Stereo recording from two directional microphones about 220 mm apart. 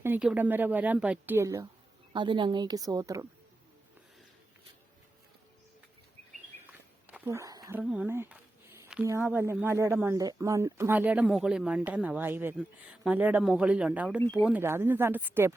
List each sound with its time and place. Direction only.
0.0 s speech: 5° right (ahead or behind)
7.1 s speech: 10° right (ahead or behind)